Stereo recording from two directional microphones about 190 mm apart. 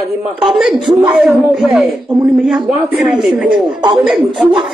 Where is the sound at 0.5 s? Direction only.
Centre (ahead or behind).